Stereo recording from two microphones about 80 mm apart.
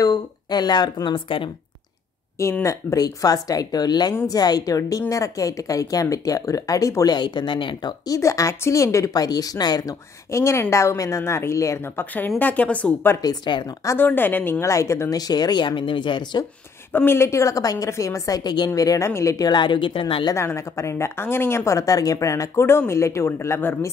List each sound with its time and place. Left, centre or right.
0.0 s speech: left
2.6 s speech: left
7.2 s speech: left
8.1 s speech: left
10.3 s a woman's voice: left; by 12.9 s centre
13.2 s speech: left
13.9 s a woman's voice: left
14.7 s a woman's voice: left
15.1 s speech: left
16.9 s speech: left
18.8 s a woman's voice: left
19.3 s a woman's voice: left
20.3 s a woman's voice: left